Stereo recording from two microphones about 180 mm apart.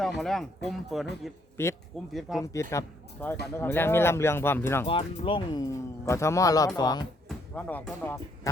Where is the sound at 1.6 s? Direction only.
15° left (ahead or behind).